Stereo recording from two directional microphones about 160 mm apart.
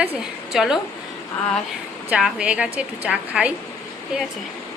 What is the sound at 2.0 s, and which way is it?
A woman's voice, 5° right (ahead or behind).